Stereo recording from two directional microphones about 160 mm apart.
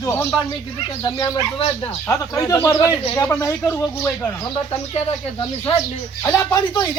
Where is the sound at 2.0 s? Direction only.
20° left (ahead or behind).